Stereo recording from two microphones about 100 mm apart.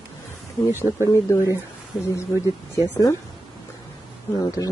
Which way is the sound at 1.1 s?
30° left (ahead or behind).